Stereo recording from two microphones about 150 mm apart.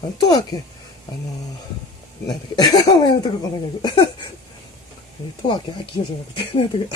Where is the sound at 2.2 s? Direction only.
25° left (ahead or behind).